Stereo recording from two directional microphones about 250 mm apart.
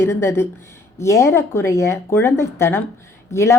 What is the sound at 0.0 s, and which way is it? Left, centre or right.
A woman's voice, centre.